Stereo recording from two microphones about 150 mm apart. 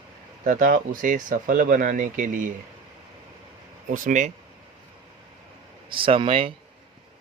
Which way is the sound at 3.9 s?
55° right (ahead or behind).